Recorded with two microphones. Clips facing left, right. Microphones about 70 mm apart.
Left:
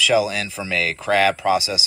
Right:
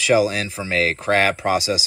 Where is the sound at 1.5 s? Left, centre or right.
Right.